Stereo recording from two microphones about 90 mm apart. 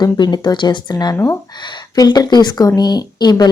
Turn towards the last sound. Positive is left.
turn(degrees=50)  # may be behind; listen again after turning